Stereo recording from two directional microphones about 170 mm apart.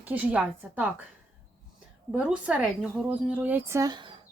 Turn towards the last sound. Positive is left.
turn(degrees=-25)  # may be behind; listen again after turning